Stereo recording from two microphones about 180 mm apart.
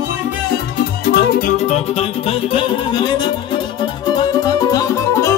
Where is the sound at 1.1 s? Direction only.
55° left (ahead or behind).